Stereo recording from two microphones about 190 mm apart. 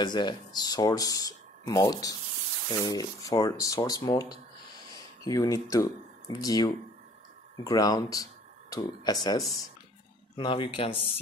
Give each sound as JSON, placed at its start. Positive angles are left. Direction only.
{"t": 0.0, "sound": "speech", "side_deg": 25}